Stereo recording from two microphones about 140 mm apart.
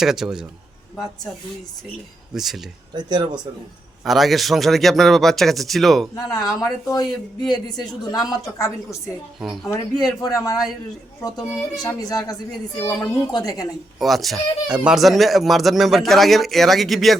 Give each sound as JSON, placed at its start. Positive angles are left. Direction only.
{"t": 0.0, "sound": "speech", "side_deg": -5}
{"t": 2.3, "sound": "speech", "side_deg": 0}
{"t": 2.9, "sound": "speech", "side_deg": -30}
{"t": 4.0, "sound": "speech", "side_deg": 0}
{"t": 6.1, "sound": "a man's voice", "side_deg": 25}
{"t": 11.2, "sound": "a man's voice", "side_deg": 25}
{"t": 14.0, "sound": "speech", "side_deg": 0}